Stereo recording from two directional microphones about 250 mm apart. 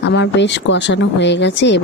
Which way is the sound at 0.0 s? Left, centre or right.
Left.